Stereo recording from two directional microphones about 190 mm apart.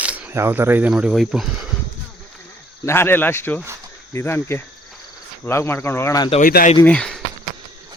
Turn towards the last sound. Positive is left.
turn(degrees=5)  # may be behind; listen again after turning